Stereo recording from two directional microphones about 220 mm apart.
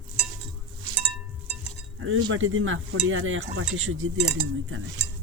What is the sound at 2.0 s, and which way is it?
Speech, 60° right (ahead or behind).